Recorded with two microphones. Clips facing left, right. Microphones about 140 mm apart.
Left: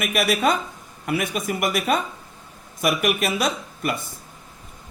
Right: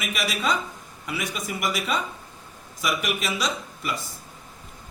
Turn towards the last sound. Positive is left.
turn(degrees=55)  # may be behind; listen again after turning